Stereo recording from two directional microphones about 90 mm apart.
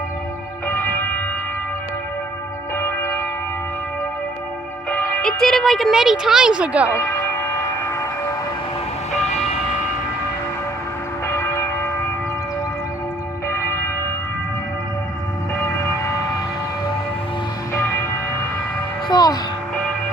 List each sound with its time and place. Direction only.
2.7 s church bell: 25° left (ahead or behind)
4.9 s speech: 15° left (ahead or behind); by 6.9 s 15° right (ahead or behind)
6.9 s speech: 25° left (ahead or behind)
7.9 s train: 30° left (ahead or behind)
11.3 s church bell: 30° left (ahead or behind)
15.5 s vehicle: 35° left (ahead or behind)
19.0 s a sound: 45° left (ahead or behind)